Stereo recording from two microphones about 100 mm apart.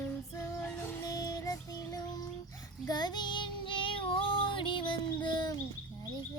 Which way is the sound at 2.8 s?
45° left (ahead or behind).